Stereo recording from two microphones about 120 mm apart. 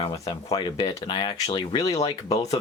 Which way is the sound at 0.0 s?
45° left (ahead or behind).